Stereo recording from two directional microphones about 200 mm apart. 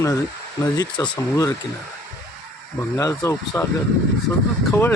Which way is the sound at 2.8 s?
15° left (ahead or behind).